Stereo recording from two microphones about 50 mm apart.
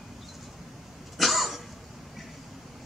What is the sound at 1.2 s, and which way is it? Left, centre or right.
Cough, centre.